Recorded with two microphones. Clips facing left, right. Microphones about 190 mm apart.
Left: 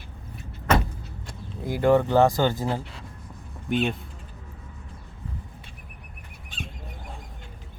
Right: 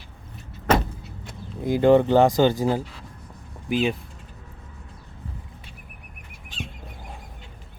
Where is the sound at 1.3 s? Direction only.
20° right (ahead or behind); by 3.9 s 5° right (ahead or behind).